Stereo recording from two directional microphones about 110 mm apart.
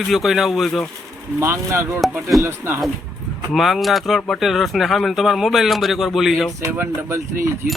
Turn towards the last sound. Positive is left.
turn(degrees=-20)  # may be behind; listen again after turning